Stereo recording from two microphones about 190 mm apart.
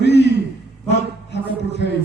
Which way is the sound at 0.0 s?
65° left (ahead or behind).